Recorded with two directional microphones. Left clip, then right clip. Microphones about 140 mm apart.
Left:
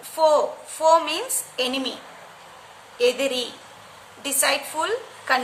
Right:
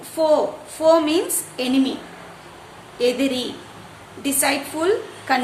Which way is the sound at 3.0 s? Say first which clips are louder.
Right 1 dB; 20° left (ahead or behind).